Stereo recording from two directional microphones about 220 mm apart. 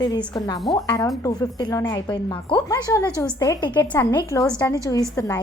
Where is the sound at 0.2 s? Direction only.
15° left (ahead or behind).